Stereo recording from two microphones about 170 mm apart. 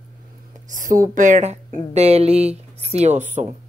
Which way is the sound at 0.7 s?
50° right (ahead or behind).